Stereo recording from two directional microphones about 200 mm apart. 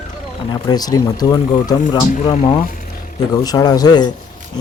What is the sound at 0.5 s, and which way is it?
Speech, 20° left (ahead or behind).